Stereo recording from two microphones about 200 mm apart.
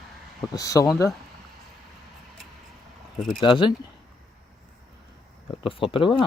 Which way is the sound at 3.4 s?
25° left (ahead or behind).